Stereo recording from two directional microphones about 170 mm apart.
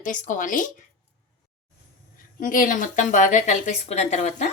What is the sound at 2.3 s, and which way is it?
A woman's voice, 55° left (ahead or behind).